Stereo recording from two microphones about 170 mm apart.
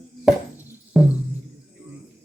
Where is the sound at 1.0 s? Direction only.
Centre (ahead or behind).